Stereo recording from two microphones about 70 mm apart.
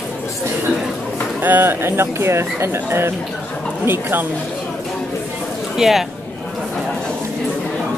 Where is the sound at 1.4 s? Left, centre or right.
Right.